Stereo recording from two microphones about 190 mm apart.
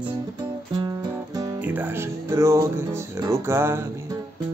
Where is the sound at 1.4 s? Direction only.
10° right (ahead or behind).